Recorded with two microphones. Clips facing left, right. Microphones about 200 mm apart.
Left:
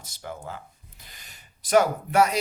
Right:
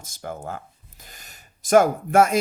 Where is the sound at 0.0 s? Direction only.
45° right (ahead or behind).